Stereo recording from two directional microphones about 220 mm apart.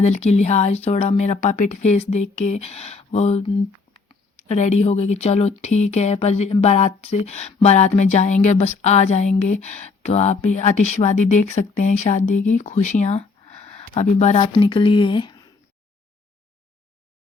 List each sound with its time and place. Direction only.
0.0 s speech: 30° left (ahead or behind)
3.9 s a sound: 25° left (ahead or behind)
4.4 s speech: 30° left (ahead or behind)